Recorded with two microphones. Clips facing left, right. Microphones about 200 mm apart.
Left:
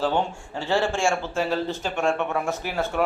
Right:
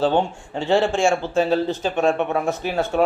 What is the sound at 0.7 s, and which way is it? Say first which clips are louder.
Speech: right 5 dB; 20° right (ahead or behind).